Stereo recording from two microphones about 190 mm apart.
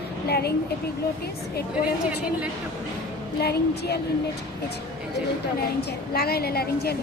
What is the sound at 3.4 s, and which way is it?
Speech, 60° left (ahead or behind).